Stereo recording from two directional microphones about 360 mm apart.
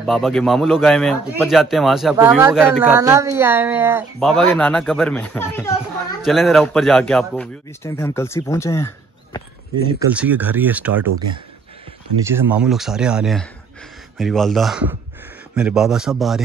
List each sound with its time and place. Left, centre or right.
0.0 s a man's voice: centre
9.9 s a man's voice: centre
12.3 s a man's voice: centre